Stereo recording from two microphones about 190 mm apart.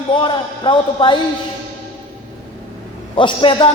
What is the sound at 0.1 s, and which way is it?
A man's voice, 25° left (ahead or behind).